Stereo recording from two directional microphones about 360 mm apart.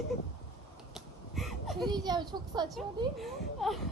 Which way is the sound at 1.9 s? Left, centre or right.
Centre.